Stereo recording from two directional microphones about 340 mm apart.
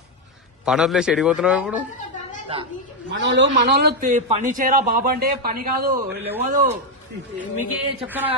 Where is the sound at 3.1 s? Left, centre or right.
Right.